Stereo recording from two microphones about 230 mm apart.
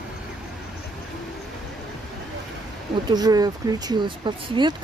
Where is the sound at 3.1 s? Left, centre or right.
Centre.